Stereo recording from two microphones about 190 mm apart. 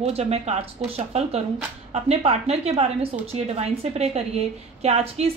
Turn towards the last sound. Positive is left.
turn(degrees=-35)  # may be behind; listen again after turning